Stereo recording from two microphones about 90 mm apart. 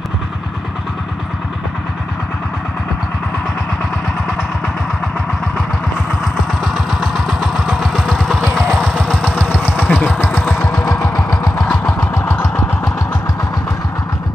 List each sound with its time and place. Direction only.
6.6 s vehicle: centre (ahead or behind)
9.0 s vehicle: 10° left (ahead or behind); by 11.2 s 30° left (ahead or behind)
11.2 s engine: 35° left (ahead or behind)
11.6 s engine: 10° left (ahead or behind)
12.0 s vehicle: 30° left (ahead or behind)